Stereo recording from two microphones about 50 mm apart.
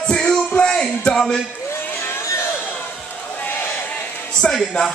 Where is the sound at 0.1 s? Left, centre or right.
Centre.